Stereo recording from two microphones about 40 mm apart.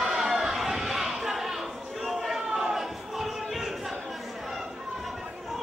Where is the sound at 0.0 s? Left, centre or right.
Centre.